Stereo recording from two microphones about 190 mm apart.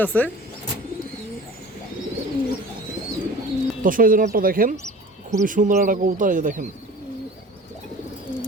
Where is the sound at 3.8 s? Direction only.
45° right (ahead or behind).